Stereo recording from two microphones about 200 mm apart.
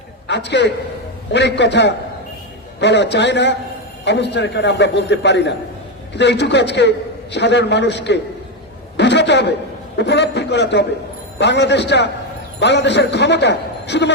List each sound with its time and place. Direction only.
0.3 s a man's voice: 60° left (ahead or behind)
9.0 s a sound: 60° left (ahead or behind)
10.0 s a man's voice: 60° left (ahead or behind)